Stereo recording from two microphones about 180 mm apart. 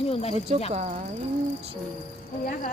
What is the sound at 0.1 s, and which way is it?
Speech, 35° left (ahead or behind).